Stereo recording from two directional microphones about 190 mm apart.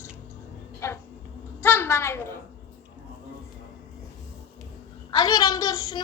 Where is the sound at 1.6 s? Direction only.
10° left (ahead or behind).